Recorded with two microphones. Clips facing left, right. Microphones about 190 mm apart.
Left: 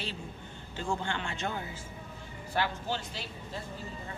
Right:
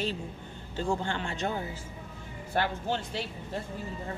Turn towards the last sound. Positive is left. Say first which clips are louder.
# right 4 dB
turn(degrees=-50)  # may be behind; listen again after turning